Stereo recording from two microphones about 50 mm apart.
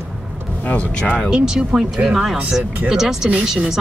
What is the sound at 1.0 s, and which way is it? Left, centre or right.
Speech, centre.